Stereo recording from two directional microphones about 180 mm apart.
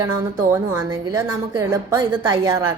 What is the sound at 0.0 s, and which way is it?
A woman's voice, 15° right (ahead or behind).